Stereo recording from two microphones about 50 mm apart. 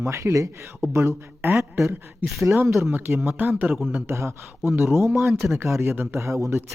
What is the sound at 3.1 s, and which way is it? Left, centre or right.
Speech, right.